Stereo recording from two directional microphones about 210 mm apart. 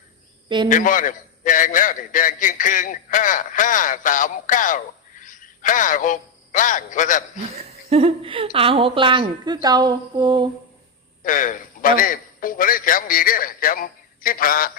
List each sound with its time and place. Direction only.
0.4 s speech: 20° right (ahead or behind)
0.7 s a man's voice: 40° left (ahead or behind)
7.4 s a woman's voice: 30° right (ahead or behind)
11.2 s a man's voice: 40° left (ahead or behind)